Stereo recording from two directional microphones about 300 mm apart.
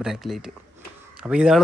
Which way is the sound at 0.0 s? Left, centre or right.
Centre.